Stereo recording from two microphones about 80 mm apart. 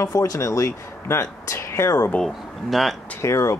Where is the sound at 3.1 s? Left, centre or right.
Left.